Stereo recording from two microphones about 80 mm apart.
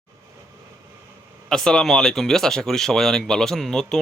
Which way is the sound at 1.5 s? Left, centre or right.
Centre.